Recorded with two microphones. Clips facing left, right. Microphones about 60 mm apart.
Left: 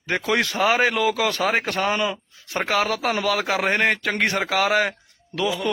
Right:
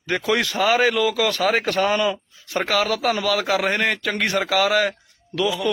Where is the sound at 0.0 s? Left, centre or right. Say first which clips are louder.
Right 1 dB; left.